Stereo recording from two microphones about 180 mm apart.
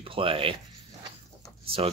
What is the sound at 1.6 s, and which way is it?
Speech, 30° right (ahead or behind).